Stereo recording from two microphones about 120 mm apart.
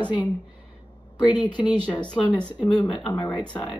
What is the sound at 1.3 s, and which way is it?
A woman's voice, 40° left (ahead or behind).